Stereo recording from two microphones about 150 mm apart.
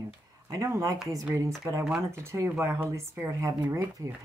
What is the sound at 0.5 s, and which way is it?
Speech, 20° right (ahead or behind).